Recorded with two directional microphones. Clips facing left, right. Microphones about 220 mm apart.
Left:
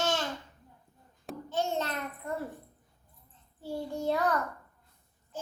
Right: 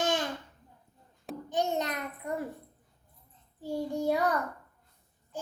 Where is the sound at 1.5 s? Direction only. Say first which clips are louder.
Right 1 dB; 15° right (ahead or behind).